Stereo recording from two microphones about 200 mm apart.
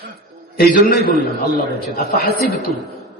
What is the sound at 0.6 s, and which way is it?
A man's voice, 45° left (ahead or behind).